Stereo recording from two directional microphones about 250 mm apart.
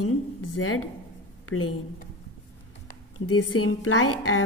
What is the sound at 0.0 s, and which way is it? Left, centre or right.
Speech, left.